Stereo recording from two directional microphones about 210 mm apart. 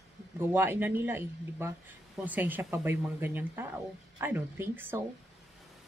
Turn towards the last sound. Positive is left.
turn(degrees=-10)  # may be behind; listen again after turning